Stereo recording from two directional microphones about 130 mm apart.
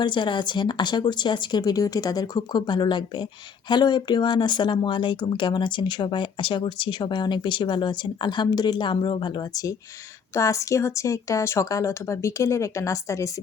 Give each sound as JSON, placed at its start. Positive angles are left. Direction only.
{"t": 0.0, "sound": "speech", "side_deg": 40}
{"t": 10.3, "sound": "speech", "side_deg": 25}